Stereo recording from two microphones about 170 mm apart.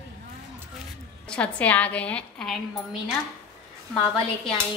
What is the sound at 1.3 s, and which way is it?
A woman's voice, 10° left (ahead or behind).